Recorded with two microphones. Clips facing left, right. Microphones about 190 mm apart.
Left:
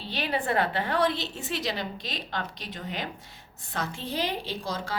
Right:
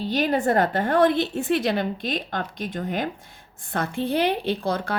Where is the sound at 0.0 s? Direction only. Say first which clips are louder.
Right 8 dB; 45° right (ahead or behind).